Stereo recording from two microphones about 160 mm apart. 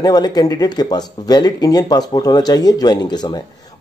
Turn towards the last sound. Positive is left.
turn(degrees=25)  # may be behind; listen again after turning